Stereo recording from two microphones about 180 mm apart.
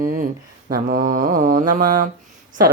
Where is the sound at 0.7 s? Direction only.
45° right (ahead or behind).